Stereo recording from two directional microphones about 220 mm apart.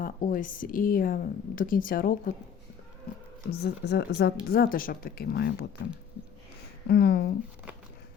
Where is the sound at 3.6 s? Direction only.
50° left (ahead or behind).